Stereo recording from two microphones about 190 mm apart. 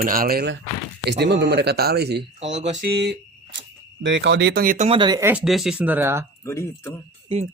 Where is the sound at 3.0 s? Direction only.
65° right (ahead or behind).